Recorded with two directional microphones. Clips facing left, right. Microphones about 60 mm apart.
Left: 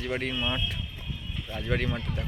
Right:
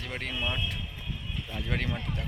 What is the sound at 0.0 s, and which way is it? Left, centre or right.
Speech, centre.